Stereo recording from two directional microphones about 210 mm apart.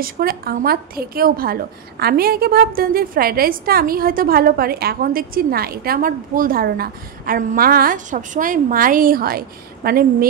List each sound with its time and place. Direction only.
0.0 s a woman's voice: 45° right (ahead or behind)